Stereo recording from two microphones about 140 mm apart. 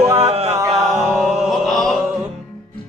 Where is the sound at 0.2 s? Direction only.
45° right (ahead or behind).